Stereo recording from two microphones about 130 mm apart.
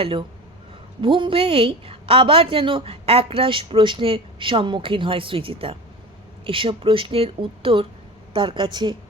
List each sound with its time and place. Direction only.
0.0 s a woman's voice: 45° right (ahead or behind)